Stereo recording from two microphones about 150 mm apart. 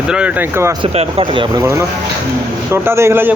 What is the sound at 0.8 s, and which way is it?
Speech, 40° right (ahead or behind).